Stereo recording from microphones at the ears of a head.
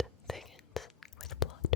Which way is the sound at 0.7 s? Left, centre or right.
Left.